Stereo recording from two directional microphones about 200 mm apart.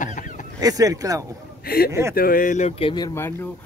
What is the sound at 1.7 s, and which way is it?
Speech, 50° left (ahead or behind).